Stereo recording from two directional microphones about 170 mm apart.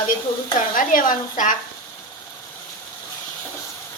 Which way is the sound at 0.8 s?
55° left (ahead or behind).